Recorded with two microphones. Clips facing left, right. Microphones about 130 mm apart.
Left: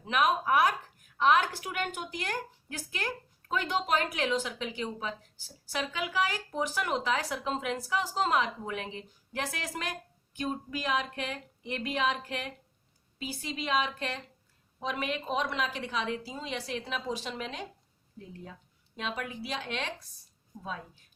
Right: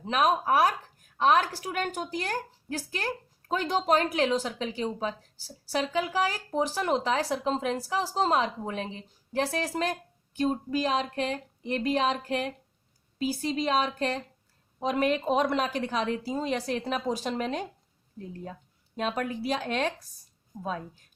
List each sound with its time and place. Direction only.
0.0 s a woman's voice: 35° right (ahead or behind)
18.9 s a woman's voice: 45° right (ahead or behind)